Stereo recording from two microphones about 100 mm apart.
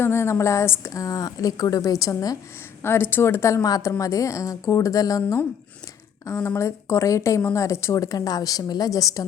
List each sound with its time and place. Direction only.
0.0 s speech: 25° left (ahead or behind)
2.8 s speech: 25° left (ahead or behind)